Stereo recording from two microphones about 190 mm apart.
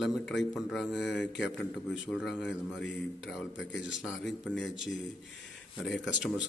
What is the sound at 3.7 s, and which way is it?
Speech, 75° left (ahead or behind).